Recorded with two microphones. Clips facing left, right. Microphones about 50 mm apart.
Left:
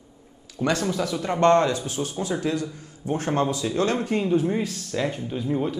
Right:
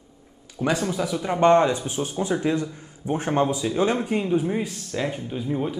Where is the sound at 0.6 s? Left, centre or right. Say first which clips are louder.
Even; centre.